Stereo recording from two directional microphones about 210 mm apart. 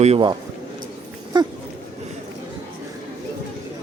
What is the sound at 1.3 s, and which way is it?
Dog, 20° right (ahead or behind).